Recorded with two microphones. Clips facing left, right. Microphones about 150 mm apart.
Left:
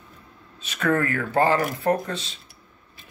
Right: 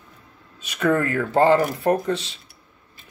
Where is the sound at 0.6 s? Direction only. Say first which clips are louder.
Right 2 dB; 20° right (ahead or behind).